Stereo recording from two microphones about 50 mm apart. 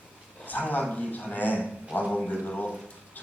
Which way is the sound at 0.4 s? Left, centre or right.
Left.